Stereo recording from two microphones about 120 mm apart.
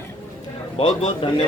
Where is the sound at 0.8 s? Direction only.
45° left (ahead or behind).